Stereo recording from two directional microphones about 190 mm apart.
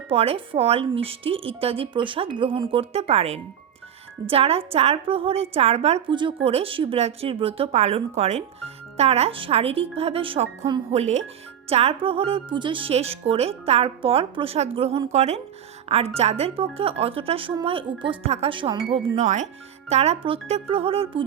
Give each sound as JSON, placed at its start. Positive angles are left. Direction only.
{"t": 0.1, "sound": "a woman's voice", "side_deg": -30}
{"t": 19.1, "sound": "a woman's voice", "side_deg": -40}